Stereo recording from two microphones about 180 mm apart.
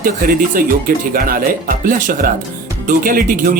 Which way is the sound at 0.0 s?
50° right (ahead or behind).